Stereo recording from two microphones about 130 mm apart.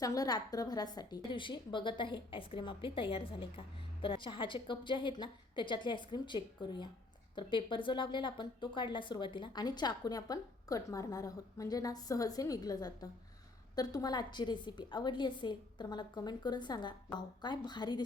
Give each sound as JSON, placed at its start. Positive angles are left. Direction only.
{"t": 0.0, "sound": "a woman's voice", "side_deg": 30}